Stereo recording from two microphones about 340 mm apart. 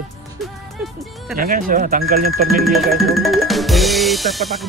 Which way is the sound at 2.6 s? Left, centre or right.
Centre.